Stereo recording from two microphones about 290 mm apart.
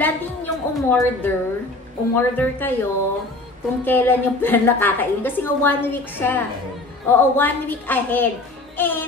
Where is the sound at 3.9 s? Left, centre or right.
Centre.